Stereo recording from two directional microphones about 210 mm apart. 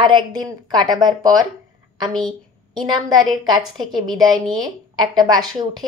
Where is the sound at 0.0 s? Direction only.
20° right (ahead or behind).